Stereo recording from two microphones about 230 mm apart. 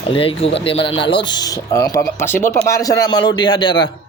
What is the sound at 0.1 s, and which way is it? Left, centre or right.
Speech, left.